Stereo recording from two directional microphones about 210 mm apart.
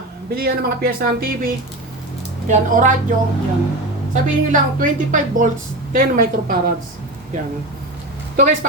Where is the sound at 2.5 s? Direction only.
35° right (ahead or behind).